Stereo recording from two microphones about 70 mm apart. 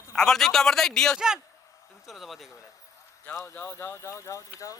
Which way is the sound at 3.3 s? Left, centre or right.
Left.